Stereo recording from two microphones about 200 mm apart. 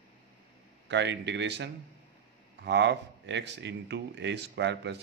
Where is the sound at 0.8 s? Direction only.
60° right (ahead or behind).